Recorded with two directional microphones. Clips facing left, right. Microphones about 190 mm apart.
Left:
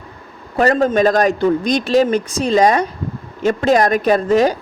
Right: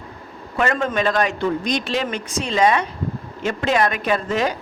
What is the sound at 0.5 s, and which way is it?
A man's voice, 40° left (ahead or behind).